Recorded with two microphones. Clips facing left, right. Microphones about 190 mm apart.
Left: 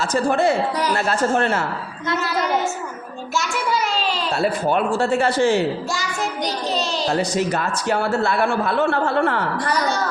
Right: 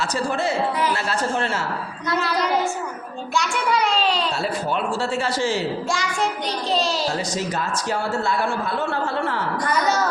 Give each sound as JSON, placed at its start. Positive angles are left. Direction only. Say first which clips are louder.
{"t": 0.0, "sound": "a man's voice", "louder": "left 5 dB", "side_deg": 55}
{"t": 0.8, "sound": "a woman's voice", "louder": "left 3 dB", "side_deg": 45}
{"t": 2.1, "sound": "a child's voice", "louder": "even", "side_deg": 0}
{"t": 4.4, "sound": "a man's voice", "louder": "left 5 dB", "side_deg": 55}
{"t": 6.7, "sound": "a child's voice", "louder": "right 4 dB", "side_deg": 0}
{"t": 7.2, "sound": "a man's voice", "louder": "left 5 dB", "side_deg": 60}